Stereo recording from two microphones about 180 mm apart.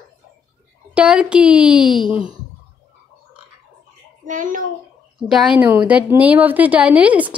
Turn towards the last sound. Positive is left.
turn(degrees=-10)  # may be behind; listen again after turning